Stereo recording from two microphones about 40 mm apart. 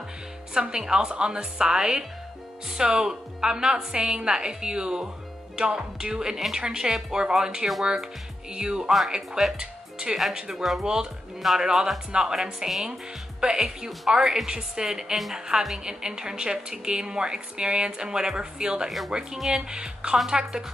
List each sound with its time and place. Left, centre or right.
0.6 s a woman's voice: centre
9.6 s music: centre
10.5 s speech: centre
10.8 s a woman's voice: centre
11.3 s speech: centre
11.6 s a woman's voice: centre
13.8 s a woman's voice: centre
18.9 s a woman's voice: centre
19.7 s a woman's voice: right